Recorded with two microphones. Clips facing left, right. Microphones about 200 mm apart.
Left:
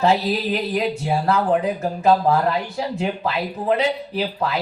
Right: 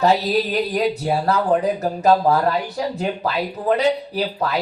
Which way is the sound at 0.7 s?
40° right (ahead or behind).